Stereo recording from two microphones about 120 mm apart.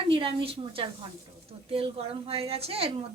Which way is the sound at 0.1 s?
45° right (ahead or behind).